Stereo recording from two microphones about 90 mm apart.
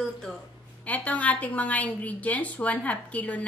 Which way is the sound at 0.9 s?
15° left (ahead or behind).